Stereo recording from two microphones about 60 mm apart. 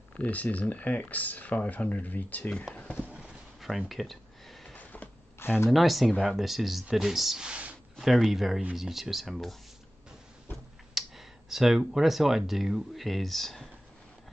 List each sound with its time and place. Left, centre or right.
0.2 s speech: left
3.2 s a sound: centre
4.7 s power windows: left
5.4 s speech: left
5.7 s speech: centre
7.4 s speech: centre
8.0 s speech: centre
11.0 s speech: centre